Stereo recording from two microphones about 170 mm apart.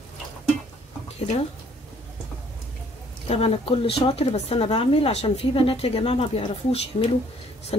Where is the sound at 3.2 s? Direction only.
35° left (ahead or behind).